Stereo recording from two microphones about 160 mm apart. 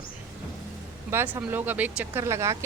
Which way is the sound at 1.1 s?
10° right (ahead or behind).